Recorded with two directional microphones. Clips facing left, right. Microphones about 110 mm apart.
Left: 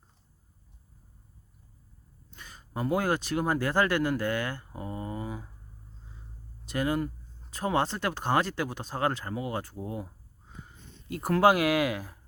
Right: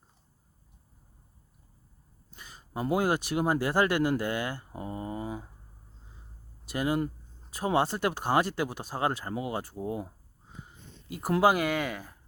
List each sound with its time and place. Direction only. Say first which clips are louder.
2.3 s a sound: even; 10° right (ahead or behind)
2.9 s speech: right 1 dB; 15° right (ahead or behind)
6.7 s speech: even; 15° right (ahead or behind)
11.3 s speech: left 2 dB; centre (ahead or behind)